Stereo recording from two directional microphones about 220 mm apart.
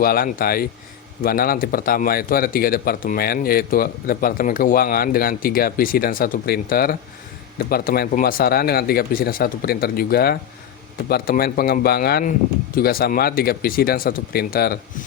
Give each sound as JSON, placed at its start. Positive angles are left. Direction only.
{"t": 0.0, "sound": "a man's voice", "side_deg": 40}